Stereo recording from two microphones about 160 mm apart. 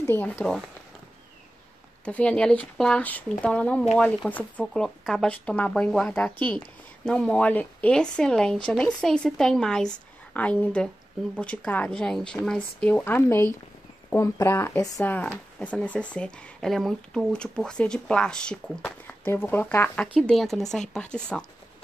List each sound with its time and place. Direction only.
0.0 s speech: 15° left (ahead or behind)
2.0 s speech: 5° left (ahead or behind)
20.2 s speech: centre (ahead or behind)